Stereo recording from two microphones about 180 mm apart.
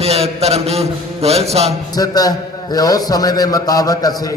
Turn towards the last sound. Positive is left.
turn(degrees=20)  # may be behind; listen again after turning